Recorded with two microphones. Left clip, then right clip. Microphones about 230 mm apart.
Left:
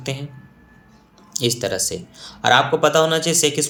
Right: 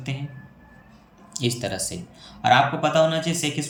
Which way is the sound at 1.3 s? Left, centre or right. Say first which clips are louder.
Left 6 dB; centre.